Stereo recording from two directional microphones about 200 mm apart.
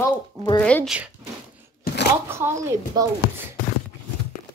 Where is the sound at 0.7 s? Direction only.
5° left (ahead or behind).